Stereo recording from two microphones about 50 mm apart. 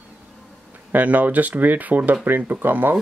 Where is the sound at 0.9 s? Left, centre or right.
Right.